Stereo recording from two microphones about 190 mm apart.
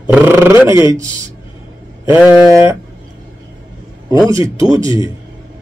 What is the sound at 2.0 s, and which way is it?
Speech, 10° right (ahead or behind).